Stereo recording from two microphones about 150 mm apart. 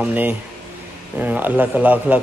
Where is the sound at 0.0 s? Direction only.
10° right (ahead or behind).